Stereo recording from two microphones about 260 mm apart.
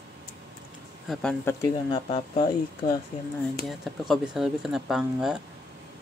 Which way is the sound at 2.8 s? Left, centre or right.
Left.